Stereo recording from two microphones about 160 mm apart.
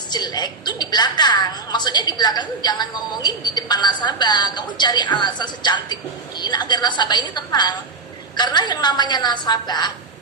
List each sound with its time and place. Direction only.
0.1 s a woman's voice: 25° left (ahead or behind)